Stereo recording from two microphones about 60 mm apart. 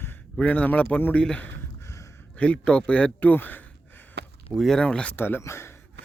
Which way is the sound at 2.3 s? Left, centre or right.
Left.